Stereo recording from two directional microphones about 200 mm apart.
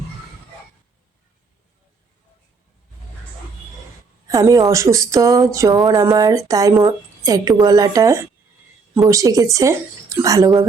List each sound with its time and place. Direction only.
4.3 s speech: 15° right (ahead or behind)